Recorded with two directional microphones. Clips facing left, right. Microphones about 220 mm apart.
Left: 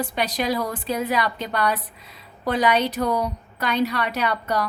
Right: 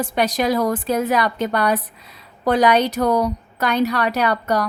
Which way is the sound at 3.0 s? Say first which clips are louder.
Right 5 dB; 75° right (ahead or behind).